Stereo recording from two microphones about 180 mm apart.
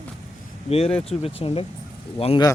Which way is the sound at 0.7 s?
35° left (ahead or behind).